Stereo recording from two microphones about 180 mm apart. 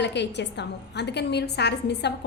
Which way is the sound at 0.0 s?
75° left (ahead or behind).